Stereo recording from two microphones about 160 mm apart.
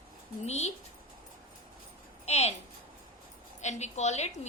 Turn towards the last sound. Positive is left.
turn(degrees=45)  # may be behind; listen again after turning